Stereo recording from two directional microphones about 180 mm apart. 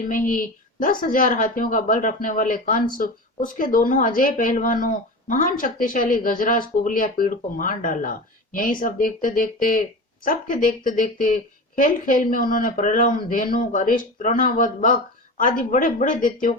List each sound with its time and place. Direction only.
0.1 s a woman's voice: 50° left (ahead or behind)